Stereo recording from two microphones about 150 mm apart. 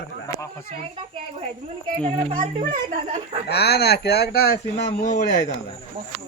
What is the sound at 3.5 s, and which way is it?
Speech, 90° left.